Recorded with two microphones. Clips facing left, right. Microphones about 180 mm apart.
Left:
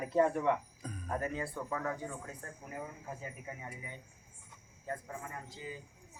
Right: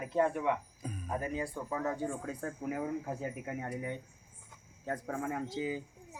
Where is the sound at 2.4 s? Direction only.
85° right.